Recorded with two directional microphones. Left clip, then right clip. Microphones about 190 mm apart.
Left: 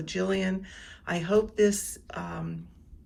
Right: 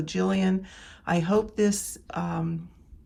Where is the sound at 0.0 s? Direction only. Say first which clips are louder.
Right 2 dB; 20° right (ahead or behind).